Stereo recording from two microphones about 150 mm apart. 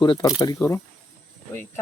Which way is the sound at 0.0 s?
30° left (ahead or behind).